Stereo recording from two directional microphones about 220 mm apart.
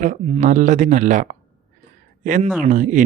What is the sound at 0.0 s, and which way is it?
Speech, 35° right (ahead or behind).